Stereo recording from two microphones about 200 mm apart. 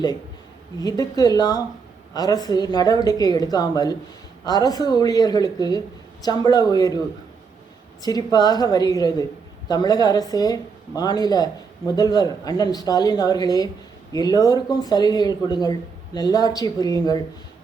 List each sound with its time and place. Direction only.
0.8 s a woman's voice: 20° left (ahead or behind)
8.0 s a woman's voice: 20° left (ahead or behind)